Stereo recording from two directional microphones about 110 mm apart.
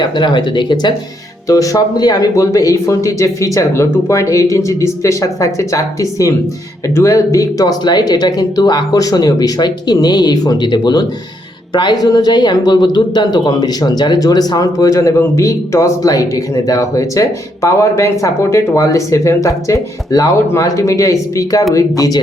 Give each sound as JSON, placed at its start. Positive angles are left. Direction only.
{"t": 0.0, "sound": "speech", "side_deg": 45}
{"t": 1.5, "sound": "speech", "side_deg": 30}